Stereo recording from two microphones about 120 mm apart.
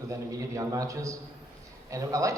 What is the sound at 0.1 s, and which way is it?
A man's voice, 25° right (ahead or behind).